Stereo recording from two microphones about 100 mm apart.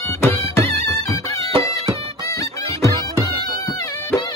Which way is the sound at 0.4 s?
90° right.